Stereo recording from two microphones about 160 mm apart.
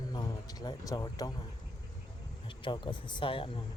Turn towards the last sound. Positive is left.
turn(degrees=35)  # may be behind; listen again after turning